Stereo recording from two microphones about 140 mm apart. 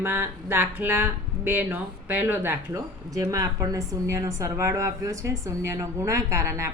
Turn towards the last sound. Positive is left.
turn(degrees=-20)  # may be behind; listen again after turning